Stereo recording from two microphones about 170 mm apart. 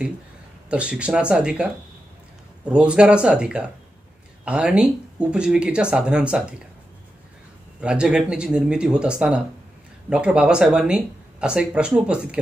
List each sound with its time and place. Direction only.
0.7 s speech: 5° right (ahead or behind)
7.8 s speech: 5° right (ahead or behind)